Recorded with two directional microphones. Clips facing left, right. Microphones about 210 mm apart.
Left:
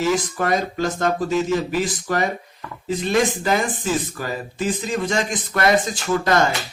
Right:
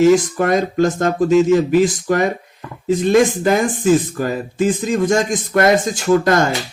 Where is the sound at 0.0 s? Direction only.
50° right (ahead or behind).